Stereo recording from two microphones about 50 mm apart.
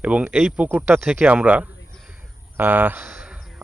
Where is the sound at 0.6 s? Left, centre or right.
Right.